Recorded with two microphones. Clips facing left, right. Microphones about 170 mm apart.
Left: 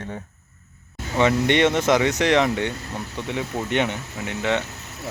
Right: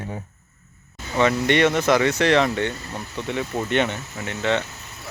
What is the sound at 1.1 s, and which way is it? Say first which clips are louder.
Speech: even; 20° left (ahead or behind).